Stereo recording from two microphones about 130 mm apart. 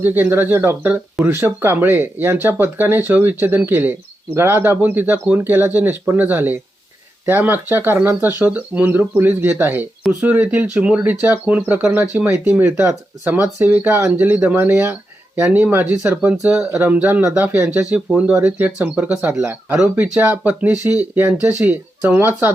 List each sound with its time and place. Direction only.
0.0 s speech: 15° right (ahead or behind)